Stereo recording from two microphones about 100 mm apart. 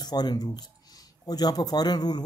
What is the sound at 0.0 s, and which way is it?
Speech, 45° left (ahead or behind).